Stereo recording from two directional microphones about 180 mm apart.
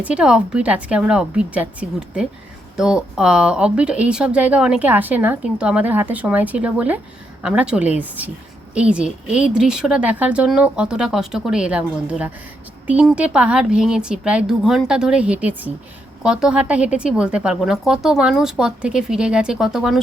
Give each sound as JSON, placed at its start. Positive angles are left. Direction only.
{"t": 0.0, "sound": "speech", "side_deg": -5}